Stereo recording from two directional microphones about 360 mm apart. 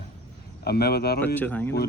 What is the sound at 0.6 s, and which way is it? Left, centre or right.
Speech, left.